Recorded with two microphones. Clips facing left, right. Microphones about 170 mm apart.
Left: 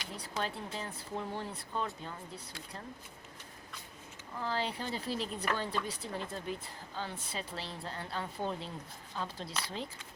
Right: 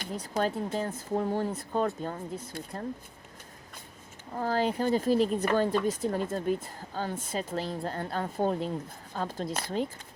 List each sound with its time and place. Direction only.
0.0 s speech: 45° right (ahead or behind)
4.4 s speech: 45° right (ahead or behind)